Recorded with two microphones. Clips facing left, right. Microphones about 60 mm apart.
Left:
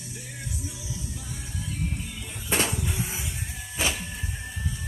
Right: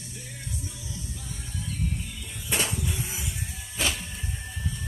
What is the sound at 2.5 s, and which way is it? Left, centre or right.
Music, left.